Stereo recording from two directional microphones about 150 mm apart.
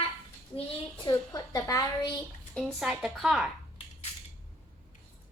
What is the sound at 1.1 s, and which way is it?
A woman's voice, 25° left (ahead or behind).